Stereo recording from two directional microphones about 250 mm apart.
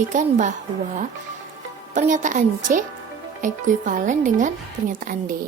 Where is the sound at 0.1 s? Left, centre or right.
Right.